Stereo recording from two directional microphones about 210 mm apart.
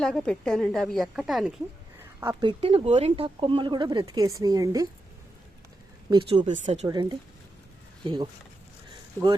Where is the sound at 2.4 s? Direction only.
25° right (ahead or behind).